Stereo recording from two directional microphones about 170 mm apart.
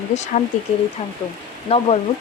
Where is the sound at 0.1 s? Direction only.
45° left (ahead or behind).